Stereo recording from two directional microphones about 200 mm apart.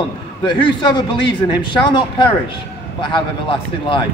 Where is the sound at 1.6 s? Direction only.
25° left (ahead or behind).